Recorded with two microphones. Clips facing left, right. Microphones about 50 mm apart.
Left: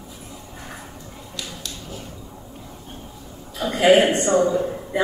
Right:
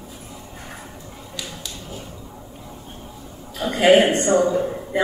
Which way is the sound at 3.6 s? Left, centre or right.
Right.